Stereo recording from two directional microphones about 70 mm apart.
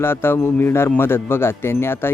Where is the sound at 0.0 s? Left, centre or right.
Left.